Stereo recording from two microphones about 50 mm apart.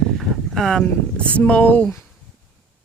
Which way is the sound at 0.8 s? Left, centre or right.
Left.